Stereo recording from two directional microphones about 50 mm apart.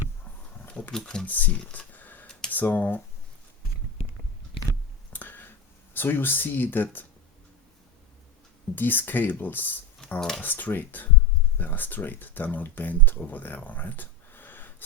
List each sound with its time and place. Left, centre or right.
0.7 s a sound: centre
0.9 s speech: centre
1.2 s speech: left
1.9 s a sound: left
2.5 s speech: left
5.1 s a sound: left
8.7 s speech: left
10.2 s speech: centre
10.4 s speech: left